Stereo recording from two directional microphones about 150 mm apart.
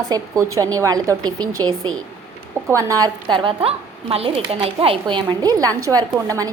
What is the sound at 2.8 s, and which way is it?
A woman's voice, 20° right (ahead or behind).